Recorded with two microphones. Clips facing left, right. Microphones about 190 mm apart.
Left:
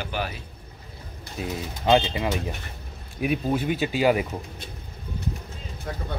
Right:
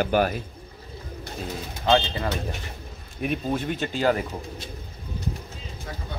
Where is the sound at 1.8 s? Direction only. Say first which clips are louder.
Left 1 dB; 15° left (ahead or behind).